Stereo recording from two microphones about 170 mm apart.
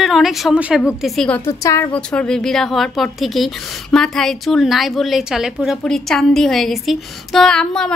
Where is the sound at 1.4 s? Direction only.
15° left (ahead or behind).